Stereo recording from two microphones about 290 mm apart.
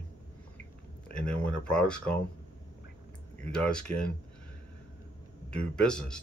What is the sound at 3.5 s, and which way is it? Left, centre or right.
Speech, centre.